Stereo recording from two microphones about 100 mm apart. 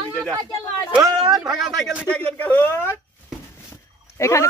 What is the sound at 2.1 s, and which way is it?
Speech, 15° left (ahead or behind).